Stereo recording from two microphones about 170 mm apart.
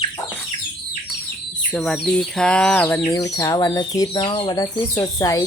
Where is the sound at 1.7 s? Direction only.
5° left (ahead or behind).